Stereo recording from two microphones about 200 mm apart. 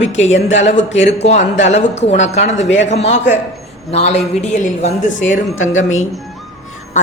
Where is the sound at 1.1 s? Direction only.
35° left (ahead or behind).